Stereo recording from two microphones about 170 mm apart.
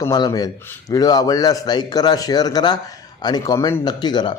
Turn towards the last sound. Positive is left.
turn(degrees=25)  # may be behind; listen again after turning